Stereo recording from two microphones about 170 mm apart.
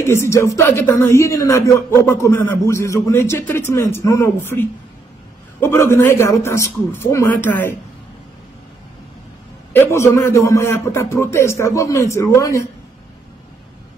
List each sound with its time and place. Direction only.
0.0 s speech: 15° left (ahead or behind)
9.7 s speech: 15° left (ahead or behind)